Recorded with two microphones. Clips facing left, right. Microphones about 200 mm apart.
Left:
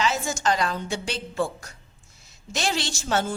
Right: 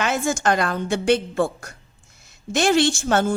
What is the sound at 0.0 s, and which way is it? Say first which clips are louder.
A woman's voice: right 4 dB; 55° right (ahead or behind).